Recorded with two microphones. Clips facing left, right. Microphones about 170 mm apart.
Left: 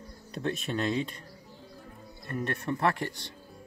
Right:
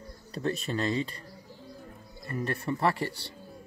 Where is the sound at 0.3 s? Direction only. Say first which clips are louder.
Right 1 dB; centre (ahead or behind).